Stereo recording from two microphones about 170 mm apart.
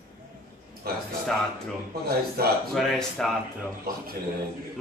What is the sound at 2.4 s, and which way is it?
Speech, 65° right (ahead or behind).